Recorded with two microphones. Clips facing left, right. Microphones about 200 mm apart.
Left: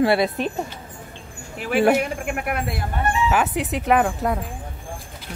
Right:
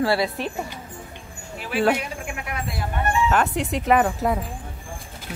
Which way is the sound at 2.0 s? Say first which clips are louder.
Left 7 dB; 55° left (ahead or behind).